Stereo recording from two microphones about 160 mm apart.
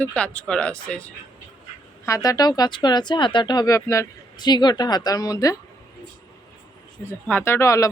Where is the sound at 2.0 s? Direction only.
20° left (ahead or behind).